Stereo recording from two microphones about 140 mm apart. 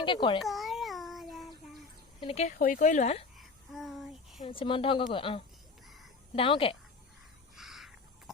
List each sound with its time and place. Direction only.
0.0 s speech: 35° left (ahead or behind)
0.3 s child singing: centre (ahead or behind)
2.2 s speech: 45° left (ahead or behind)
2.5 s speech: 70° left (ahead or behind); by 3.2 s 55° left (ahead or behind)
3.3 s a sound: centre (ahead or behind)
4.4 s speech: 35° left (ahead or behind)
7.5 s a sound: centre (ahead or behind)